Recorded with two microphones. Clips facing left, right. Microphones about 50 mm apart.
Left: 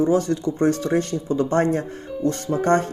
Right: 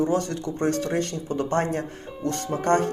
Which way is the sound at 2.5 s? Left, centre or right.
Centre.